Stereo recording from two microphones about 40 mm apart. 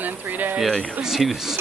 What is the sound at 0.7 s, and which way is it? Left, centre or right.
Speech, centre.